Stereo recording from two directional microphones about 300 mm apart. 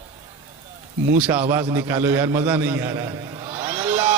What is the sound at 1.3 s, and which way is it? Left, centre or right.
A man's voice, centre.